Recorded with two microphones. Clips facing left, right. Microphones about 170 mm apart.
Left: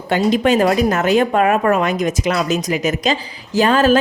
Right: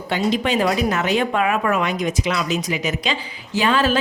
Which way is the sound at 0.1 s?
45° left (ahead or behind).